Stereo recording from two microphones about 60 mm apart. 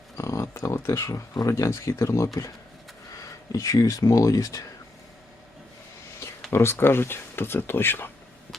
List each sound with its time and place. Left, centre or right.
0.2 s speech: left
1.5 s speech: left
3.5 s speech: left
6.5 s speech: left